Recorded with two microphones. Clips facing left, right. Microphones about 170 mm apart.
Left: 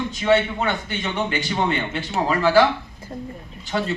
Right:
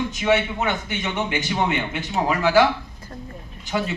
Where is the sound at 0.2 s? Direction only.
15° right (ahead or behind).